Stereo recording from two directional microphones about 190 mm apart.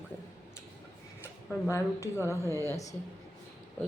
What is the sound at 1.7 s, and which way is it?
Speech, 15° left (ahead or behind).